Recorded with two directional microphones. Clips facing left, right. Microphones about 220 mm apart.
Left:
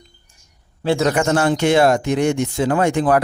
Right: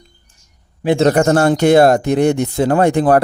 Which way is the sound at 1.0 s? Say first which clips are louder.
Right 6 dB; 40° right (ahead or behind).